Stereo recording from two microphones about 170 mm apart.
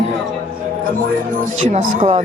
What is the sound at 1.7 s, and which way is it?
Speech, 40° right (ahead or behind).